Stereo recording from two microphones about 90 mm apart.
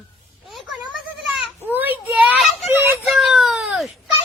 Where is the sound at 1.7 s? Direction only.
20° right (ahead or behind).